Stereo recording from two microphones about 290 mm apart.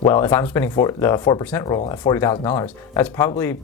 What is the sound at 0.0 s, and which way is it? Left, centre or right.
Speech, centre.